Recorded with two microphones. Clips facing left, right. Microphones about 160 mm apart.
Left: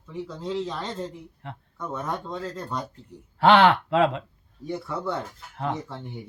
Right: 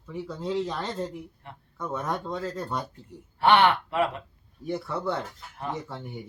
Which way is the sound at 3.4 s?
90° left.